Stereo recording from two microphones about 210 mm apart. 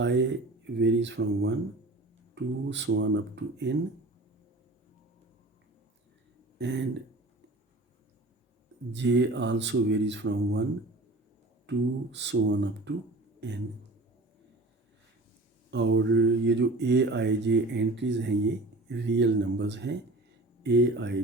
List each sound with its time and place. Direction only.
0.0 s speech: 55° right (ahead or behind)
6.6 s speech: 55° right (ahead or behind)
8.9 s speech: 55° right (ahead or behind)
11.7 s speech: 55° right (ahead or behind)
15.7 s speech: 60° right (ahead or behind)